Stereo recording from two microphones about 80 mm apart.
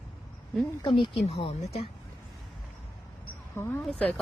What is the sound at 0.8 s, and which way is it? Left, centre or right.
Speech, left.